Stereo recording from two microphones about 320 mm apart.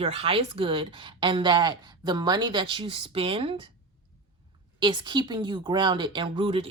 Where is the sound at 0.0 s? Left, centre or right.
Centre.